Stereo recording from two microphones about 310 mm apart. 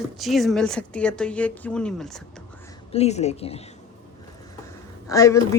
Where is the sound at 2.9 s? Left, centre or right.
Centre.